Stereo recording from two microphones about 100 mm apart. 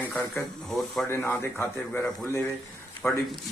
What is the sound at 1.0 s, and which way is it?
Speech, 25° left (ahead or behind).